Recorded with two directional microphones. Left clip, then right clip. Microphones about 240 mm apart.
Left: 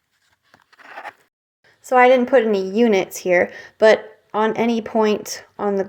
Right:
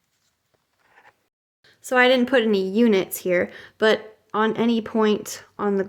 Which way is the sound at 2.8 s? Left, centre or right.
Centre.